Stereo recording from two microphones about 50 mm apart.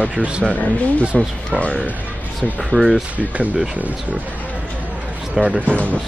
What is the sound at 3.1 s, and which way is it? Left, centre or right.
Speech, right.